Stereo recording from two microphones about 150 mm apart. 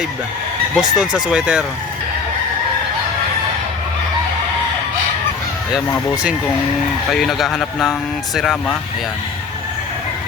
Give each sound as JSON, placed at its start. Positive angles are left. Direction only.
{"t": 0.8, "sound": "speech", "side_deg": -5}
{"t": 7.1, "sound": "speech", "side_deg": 0}